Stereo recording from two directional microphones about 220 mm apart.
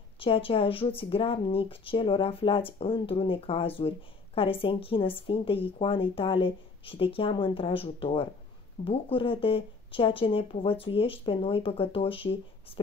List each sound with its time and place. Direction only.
0.2 s speech: 25° left (ahead or behind)